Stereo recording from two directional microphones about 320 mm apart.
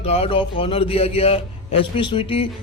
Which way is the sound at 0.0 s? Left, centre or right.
Centre.